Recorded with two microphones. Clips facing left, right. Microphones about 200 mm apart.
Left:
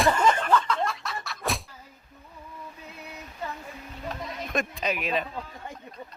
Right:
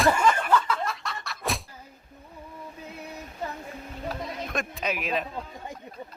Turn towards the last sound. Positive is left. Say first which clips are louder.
# left 1 dB
turn(degrees=0)  # may be behind; listen again after turning